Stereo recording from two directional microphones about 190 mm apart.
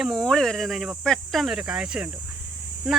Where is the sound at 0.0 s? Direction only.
Centre (ahead or behind).